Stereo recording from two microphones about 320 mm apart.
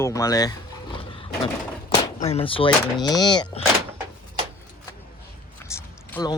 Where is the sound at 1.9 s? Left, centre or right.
Centre.